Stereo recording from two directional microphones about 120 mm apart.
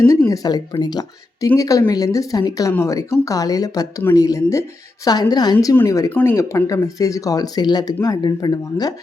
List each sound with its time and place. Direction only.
0.3 s speech: 30° left (ahead or behind)
6.1 s speech: 15° left (ahead or behind)
6.7 s speech: 30° left (ahead or behind)